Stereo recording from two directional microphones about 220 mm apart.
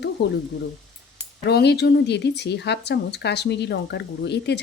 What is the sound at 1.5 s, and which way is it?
Speech, 50° left (ahead or behind).